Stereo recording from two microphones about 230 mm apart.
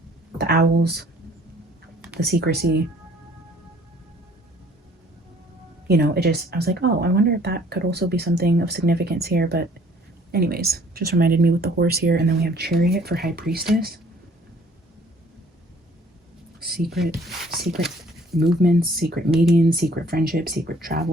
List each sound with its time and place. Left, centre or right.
0.3 s speech: right
2.1 s speech: right
5.9 s speech: right
16.6 s a sound: right
17.7 s a sound: centre
18.6 s speech: right
19.5 s speech: centre
19.7 s speech: right